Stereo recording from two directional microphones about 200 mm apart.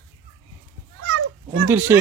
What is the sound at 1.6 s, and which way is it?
Speech, 10° right (ahead or behind).